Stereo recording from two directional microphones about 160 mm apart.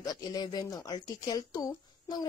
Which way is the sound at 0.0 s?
25° left (ahead or behind).